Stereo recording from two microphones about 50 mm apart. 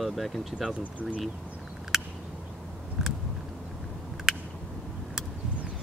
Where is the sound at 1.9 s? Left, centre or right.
Centre.